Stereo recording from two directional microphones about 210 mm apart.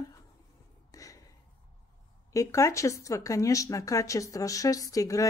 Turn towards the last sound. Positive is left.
turn(degrees=15)  # may be behind; listen again after turning